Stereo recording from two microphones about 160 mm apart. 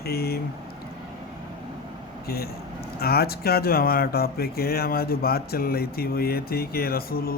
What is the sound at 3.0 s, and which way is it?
Speech, 75° left (ahead or behind).